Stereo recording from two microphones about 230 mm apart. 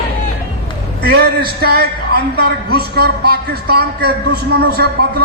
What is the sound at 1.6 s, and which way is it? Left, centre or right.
Speech, right.